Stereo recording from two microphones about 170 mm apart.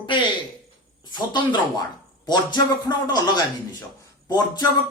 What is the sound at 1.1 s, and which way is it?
Speech, 25° left (ahead or behind).